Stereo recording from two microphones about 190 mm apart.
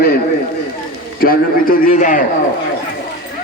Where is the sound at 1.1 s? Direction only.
50° left (ahead or behind).